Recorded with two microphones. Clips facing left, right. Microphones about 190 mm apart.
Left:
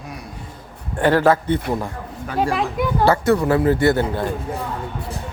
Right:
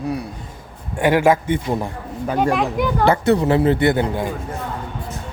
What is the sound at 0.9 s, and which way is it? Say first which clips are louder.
Speech: even; 10° right (ahead or behind).